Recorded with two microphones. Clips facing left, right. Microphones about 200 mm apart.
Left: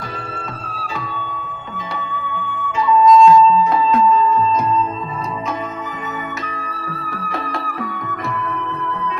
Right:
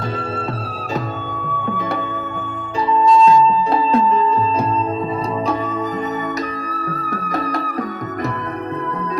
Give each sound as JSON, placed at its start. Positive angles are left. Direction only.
{"t": 1.7, "sound": "flute", "side_deg": -55}
{"t": 7.1, "sound": "music", "side_deg": -40}